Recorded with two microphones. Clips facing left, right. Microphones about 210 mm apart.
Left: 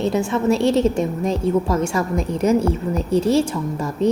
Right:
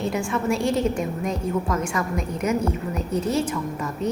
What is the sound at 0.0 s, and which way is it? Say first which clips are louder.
A woman's voice: left 5 dB; 25° left (ahead or behind).